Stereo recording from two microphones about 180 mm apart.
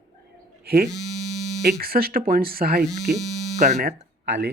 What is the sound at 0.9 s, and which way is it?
Hum, centre (ahead or behind).